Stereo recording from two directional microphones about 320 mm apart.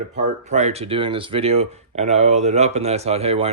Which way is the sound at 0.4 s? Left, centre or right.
Right.